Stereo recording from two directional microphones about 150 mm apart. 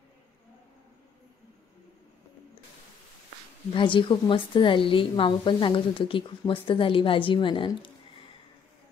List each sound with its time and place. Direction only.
3.7 s a woman's voice: 35° left (ahead or behind)